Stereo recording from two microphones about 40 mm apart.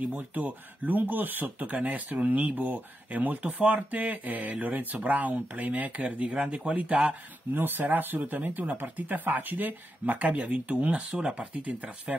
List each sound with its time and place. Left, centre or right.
0.3 s speech: right
1.6 s speech: right
7.5 s speech: right